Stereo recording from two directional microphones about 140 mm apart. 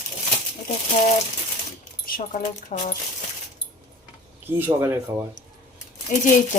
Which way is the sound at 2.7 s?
60° left (ahead or behind).